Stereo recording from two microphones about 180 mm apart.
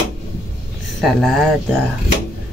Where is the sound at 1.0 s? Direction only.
Centre (ahead or behind).